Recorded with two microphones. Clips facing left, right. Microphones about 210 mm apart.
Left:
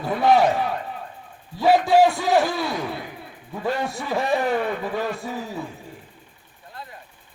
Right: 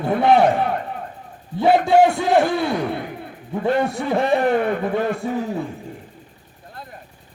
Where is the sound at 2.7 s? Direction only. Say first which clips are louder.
Right 5 dB; 55° right (ahead or behind).